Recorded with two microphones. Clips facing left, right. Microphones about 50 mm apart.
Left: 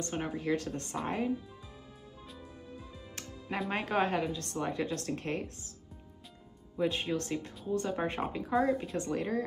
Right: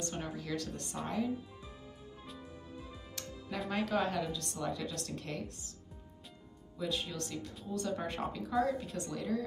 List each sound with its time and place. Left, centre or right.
0.0 s speech: left
3.7 s speech: left
6.8 s speech: left